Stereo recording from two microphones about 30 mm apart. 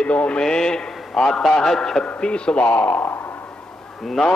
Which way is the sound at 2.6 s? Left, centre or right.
Left.